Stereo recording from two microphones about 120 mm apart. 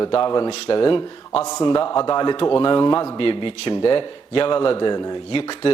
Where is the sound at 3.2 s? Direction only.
45° left (ahead or behind).